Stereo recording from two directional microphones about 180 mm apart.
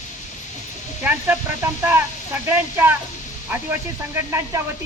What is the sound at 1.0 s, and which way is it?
Speech, 10° right (ahead or behind).